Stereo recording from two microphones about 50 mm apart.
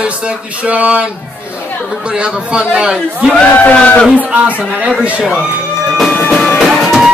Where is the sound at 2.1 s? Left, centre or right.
Right.